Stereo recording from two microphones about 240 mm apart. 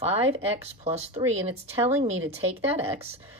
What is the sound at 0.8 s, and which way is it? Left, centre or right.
Speech, right.